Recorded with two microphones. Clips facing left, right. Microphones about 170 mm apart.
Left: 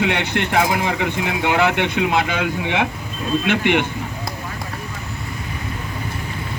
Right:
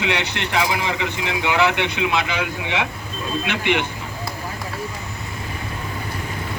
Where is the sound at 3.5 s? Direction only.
55° left (ahead or behind).